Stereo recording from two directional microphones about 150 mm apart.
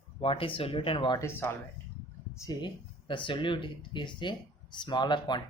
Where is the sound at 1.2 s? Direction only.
15° left (ahead or behind).